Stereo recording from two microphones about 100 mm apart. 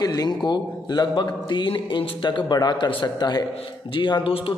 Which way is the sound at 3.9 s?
55° left (ahead or behind).